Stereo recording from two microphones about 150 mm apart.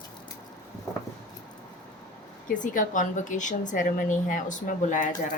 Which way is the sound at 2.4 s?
60° left (ahead or behind).